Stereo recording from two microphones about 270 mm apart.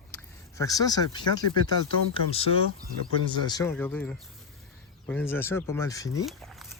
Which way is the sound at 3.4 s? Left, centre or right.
Centre.